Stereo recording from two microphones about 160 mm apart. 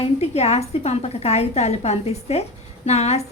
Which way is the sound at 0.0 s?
40° left (ahead or behind).